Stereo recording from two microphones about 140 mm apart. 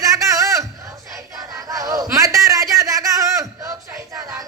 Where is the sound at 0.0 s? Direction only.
25° right (ahead or behind).